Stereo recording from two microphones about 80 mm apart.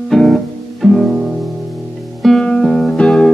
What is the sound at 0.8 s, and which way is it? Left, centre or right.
Music, centre.